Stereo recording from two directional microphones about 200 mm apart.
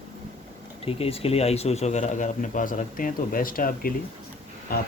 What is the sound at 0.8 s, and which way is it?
Speech, 30° left (ahead or behind).